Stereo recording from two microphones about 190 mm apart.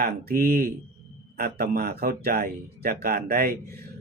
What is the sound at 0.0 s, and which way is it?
Speech, 50° right (ahead or behind).